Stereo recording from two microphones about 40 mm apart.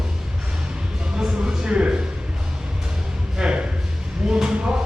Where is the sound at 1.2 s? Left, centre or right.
Centre.